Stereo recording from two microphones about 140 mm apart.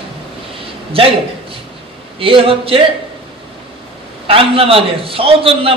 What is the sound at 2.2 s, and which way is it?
Speech, 40° right (ahead or behind).